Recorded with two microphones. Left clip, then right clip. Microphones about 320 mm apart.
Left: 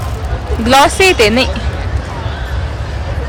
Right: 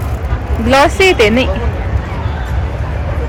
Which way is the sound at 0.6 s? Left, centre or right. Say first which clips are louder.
Left 1 dB; centre.